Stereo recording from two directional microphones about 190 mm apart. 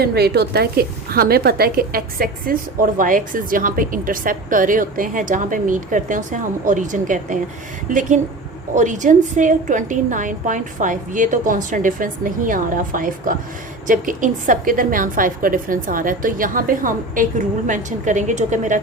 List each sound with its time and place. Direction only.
0.0 s a woman's voice: 55° right (ahead or behind); by 18.8 s 40° right (ahead or behind)